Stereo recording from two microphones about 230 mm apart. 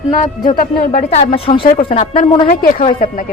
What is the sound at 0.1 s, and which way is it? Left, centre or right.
Speech, left.